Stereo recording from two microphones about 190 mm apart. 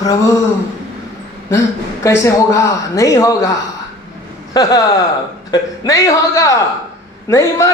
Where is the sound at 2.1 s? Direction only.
15° left (ahead or behind).